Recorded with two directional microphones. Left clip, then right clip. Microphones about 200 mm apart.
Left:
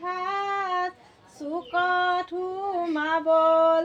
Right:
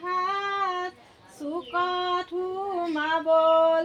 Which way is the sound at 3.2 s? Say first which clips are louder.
Even; 10° left (ahead or behind).